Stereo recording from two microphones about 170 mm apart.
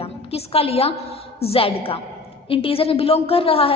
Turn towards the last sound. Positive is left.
turn(degrees=35)  # may be behind; listen again after turning